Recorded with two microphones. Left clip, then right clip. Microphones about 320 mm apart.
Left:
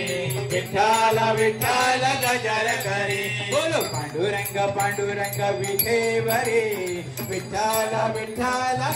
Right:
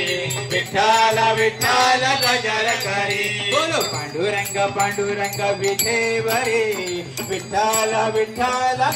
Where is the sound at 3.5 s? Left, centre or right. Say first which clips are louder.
Right 2 dB; right.